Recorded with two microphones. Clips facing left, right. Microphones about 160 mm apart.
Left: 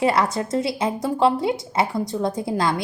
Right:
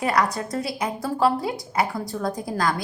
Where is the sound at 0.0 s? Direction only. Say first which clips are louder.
Left 3 dB; 25° left (ahead or behind).